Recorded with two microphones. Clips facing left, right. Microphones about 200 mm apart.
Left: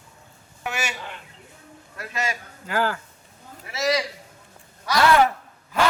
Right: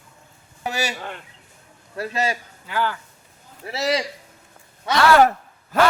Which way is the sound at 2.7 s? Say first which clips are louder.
Even; 45° left (ahead or behind).